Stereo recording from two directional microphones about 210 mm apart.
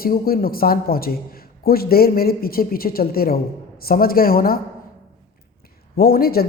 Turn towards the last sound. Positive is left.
turn(degrees=45)  # may be behind; listen again after turning